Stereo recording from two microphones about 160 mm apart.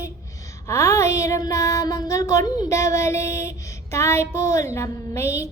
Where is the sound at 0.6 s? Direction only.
20° left (ahead or behind).